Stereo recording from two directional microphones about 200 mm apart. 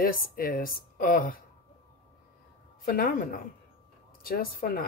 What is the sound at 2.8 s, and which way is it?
Speech, 50° left (ahead or behind).